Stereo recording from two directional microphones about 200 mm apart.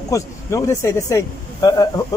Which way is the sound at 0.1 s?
15° left (ahead or behind).